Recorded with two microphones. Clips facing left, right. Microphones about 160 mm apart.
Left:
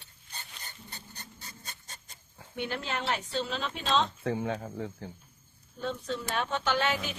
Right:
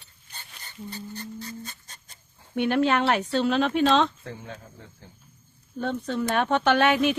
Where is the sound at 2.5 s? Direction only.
65° right (ahead or behind).